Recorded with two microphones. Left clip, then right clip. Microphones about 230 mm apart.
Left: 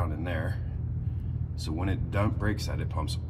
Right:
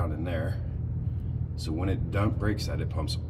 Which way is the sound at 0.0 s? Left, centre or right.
Centre.